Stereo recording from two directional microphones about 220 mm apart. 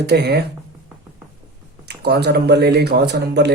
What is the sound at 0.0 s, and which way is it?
Speech, 50° right (ahead or behind).